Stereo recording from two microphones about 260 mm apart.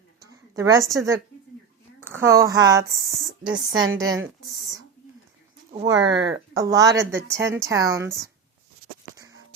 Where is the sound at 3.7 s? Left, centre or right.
Right.